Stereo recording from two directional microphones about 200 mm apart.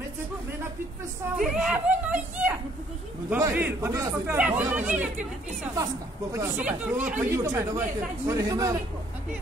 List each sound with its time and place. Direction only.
1.4 s speech: centre (ahead or behind)
6.3 s speech: 10° right (ahead or behind)